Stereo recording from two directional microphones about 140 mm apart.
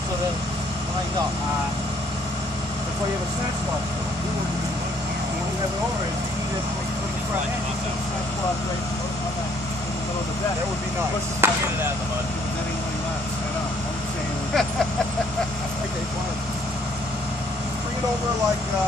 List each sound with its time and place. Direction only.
11.4 s chop: 15° right (ahead or behind)